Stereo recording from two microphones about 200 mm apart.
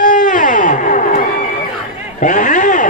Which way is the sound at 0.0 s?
40° left (ahead or behind).